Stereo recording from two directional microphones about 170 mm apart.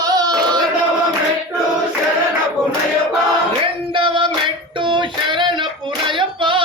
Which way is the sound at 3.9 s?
30° right (ahead or behind).